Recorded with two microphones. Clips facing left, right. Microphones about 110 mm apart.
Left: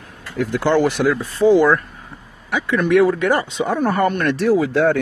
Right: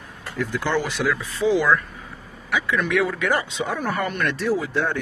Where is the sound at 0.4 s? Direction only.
60° left (ahead or behind).